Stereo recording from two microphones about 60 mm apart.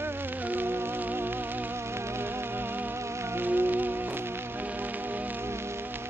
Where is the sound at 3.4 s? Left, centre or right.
Right.